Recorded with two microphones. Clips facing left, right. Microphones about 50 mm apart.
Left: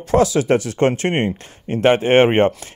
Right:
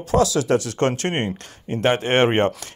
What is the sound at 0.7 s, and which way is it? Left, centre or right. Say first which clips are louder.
Speech: left 4 dB; left.